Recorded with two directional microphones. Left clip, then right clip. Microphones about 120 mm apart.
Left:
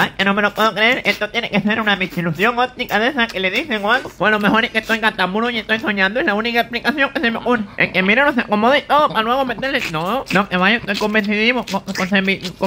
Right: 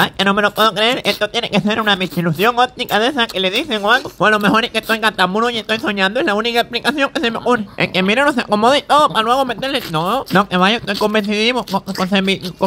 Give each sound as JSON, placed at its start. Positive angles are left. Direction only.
{"t": 0.0, "sound": "speech", "side_deg": -40}